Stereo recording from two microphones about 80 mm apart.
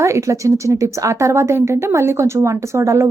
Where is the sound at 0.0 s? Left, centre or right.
Right.